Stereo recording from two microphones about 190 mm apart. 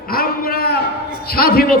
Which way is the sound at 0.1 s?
50° left (ahead or behind).